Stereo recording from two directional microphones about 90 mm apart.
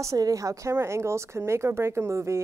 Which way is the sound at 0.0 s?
35° right (ahead or behind).